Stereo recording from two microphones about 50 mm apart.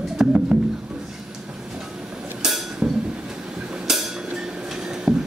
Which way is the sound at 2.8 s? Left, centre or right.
Right.